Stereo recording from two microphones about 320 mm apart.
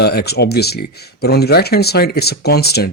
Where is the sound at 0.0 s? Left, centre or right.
Left.